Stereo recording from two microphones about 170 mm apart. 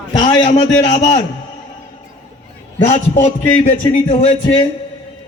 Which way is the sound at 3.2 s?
45° left (ahead or behind).